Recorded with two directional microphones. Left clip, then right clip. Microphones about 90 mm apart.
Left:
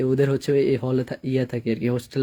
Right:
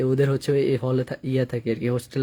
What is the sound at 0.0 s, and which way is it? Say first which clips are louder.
Speech: left 1 dB; 20° right (ahead or behind).